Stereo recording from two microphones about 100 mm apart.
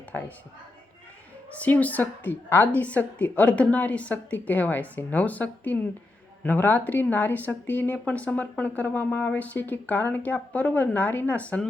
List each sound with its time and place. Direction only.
1.5 s a woman's voice: 15° left (ahead or behind)